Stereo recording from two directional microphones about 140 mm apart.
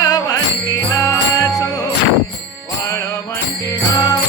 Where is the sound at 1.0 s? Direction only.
25° left (ahead or behind).